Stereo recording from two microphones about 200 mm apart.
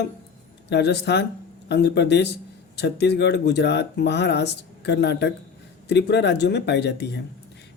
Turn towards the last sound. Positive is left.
turn(degrees=60)  # may be behind; listen again after turning